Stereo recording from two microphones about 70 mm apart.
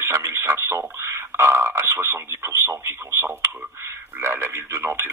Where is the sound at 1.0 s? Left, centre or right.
Right.